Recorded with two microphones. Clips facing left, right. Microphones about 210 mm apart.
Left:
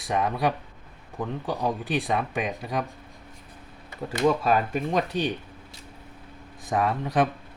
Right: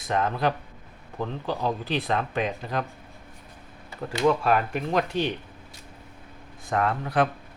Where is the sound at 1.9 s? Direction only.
15° left (ahead or behind).